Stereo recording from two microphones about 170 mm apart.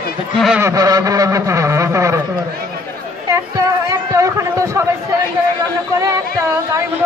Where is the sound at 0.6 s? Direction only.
20° right (ahead or behind).